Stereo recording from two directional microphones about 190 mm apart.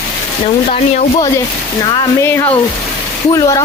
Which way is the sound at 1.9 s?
15° left (ahead or behind).